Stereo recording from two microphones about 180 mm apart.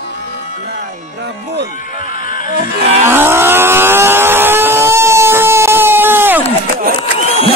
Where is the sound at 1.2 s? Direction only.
70° right (ahead or behind).